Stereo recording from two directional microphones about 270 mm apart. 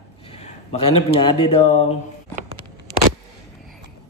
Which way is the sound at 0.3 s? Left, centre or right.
Left.